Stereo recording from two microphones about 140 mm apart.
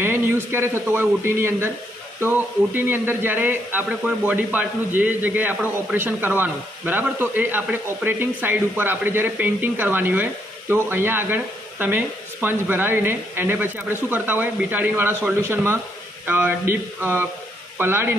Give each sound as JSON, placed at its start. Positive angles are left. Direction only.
{"t": 0.0, "sound": "a man's voice", "side_deg": -15}